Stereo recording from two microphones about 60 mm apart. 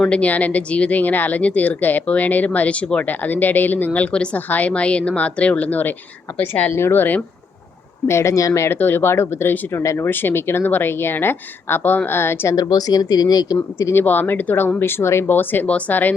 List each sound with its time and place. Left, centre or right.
0.1 s speech: left
4.4 s speech: left
6.7 s a woman's voice: left
8.0 s speech: left
8.6 s speech: left
10.1 s a woman's voice: left
12.5 s speech: left
13.9 s a woman's voice: left
15.3 s a woman's voice: left